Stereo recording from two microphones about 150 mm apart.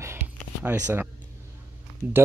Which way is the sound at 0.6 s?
10° right (ahead or behind).